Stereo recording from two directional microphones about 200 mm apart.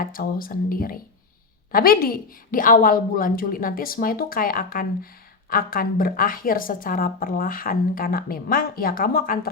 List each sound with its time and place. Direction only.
0.0 s a woman's voice: 45° left (ahead or behind)